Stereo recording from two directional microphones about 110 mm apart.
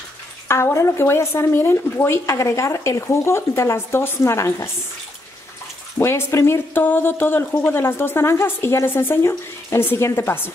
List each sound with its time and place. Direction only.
0.5 s a woman's voice: 25° left (ahead or behind)
5.9 s a woman's voice: 25° left (ahead or behind)